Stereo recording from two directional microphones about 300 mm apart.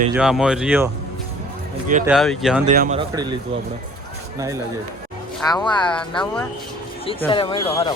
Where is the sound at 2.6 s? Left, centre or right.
Right.